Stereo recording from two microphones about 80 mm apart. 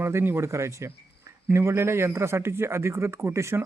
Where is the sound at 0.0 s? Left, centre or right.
Right.